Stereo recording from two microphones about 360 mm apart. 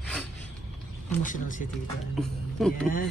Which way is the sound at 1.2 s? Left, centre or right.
Left.